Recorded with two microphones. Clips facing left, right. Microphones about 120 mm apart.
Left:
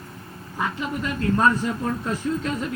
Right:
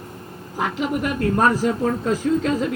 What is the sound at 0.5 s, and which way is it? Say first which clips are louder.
Speech: right 4 dB; 90° right.